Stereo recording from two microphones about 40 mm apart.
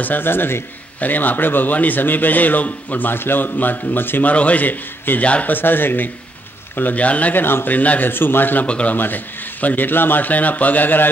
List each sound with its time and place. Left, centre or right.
0.0 s a man's voice: left
1.0 s a man's voice: left
3.1 s a man's voice: left
4.3 s speech: left
5.5 s a man's voice: left
6.8 s speech: left
7.3 s a man's voice: left
7.7 s speech: left
8.0 s a man's voice: left
8.6 s speech: left
8.9 s a man's voice: left